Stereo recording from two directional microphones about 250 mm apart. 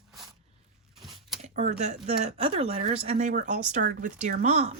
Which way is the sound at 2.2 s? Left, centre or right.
Right.